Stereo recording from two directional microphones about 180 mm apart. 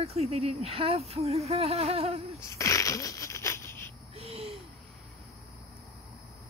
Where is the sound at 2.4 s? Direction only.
15° left (ahead or behind).